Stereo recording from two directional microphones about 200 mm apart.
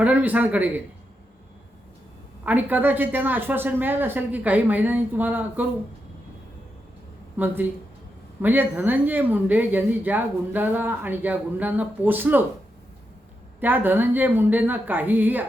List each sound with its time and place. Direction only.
0.0 s speech: 10° right (ahead or behind)
2.4 s speech: 10° right (ahead or behind)
7.3 s speech: 10° right (ahead or behind)
13.6 s speech: 10° right (ahead or behind)